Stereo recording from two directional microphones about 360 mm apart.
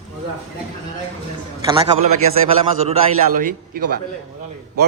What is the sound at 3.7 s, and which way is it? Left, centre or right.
Speech, right.